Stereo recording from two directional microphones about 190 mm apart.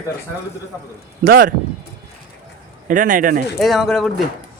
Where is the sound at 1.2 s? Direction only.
50° right (ahead or behind).